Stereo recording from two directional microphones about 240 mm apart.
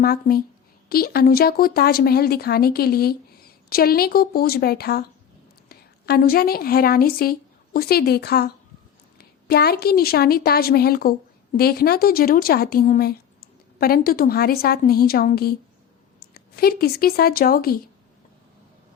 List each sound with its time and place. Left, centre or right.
0.0 s a woman's voice: left